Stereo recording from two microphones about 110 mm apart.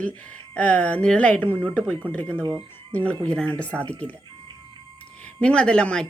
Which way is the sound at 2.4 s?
30° right (ahead or behind).